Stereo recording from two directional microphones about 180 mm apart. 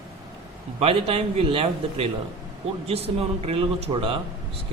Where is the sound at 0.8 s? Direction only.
30° right (ahead or behind).